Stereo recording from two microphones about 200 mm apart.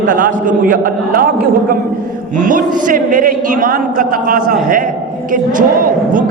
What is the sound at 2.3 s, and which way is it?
A man's voice, 40° right (ahead or behind).